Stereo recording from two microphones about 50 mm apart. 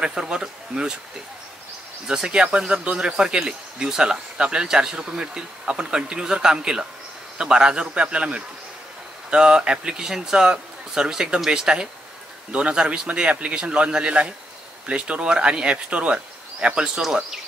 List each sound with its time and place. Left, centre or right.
0.0 s speech: centre
2.0 s speech: centre
12.4 s speech: right